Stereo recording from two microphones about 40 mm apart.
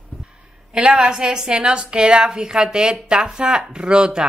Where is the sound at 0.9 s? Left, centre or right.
Centre.